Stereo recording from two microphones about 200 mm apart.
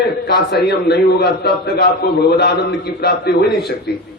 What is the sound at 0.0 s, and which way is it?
A man's voice, 55° left (ahead or behind).